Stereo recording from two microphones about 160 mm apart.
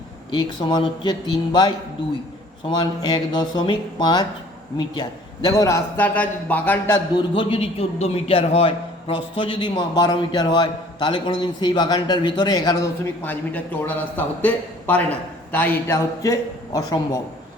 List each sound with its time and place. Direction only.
0.3 s a man's voice: 25° left (ahead or behind)
2.6 s a man's voice: 25° left (ahead or behind); by 6.9 s 10° left (ahead or behind)
7.1 s a man's voice: 30° left (ahead or behind)
13.2 s a man's voice: 10° left (ahead or behind)